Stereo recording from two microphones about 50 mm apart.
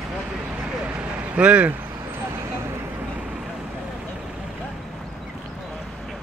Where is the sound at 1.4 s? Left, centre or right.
Right.